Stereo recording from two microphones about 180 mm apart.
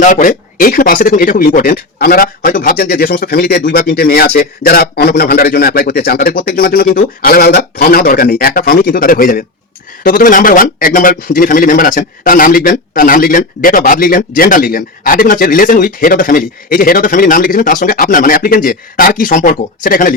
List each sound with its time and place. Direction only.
0.0 s speech: 45° left (ahead or behind)